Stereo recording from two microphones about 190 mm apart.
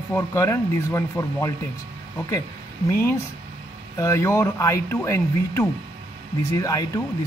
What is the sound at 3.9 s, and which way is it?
Speech, 15° left (ahead or behind).